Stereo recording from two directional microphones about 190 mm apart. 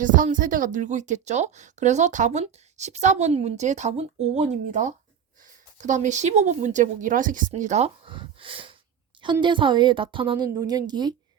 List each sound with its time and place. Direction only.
0.0 s a woman's voice: 45° right (ahead or behind); by 11.1 s 20° right (ahead or behind)